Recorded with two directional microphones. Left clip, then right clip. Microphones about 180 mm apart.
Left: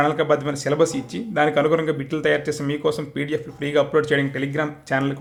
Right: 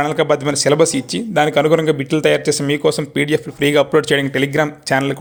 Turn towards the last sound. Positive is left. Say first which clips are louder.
# right 6 dB
turn(degrees=-35)  # may be behind; listen again after turning